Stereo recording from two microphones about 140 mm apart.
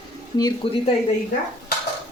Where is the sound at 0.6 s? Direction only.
40° left (ahead or behind).